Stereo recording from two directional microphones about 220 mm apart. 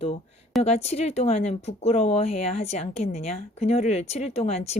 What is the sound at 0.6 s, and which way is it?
Speech, 30° left (ahead or behind).